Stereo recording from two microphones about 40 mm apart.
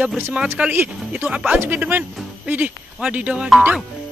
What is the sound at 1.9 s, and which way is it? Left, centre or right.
Speech, right.